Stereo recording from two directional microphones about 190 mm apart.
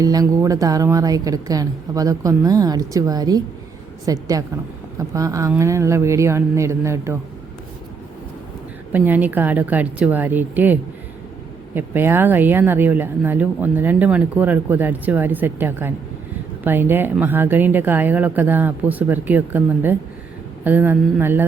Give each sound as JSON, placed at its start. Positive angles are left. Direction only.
{"t": 0.0, "sound": "a woman's voice", "side_deg": -20}
{"t": 8.9, "sound": "speech", "side_deg": -10}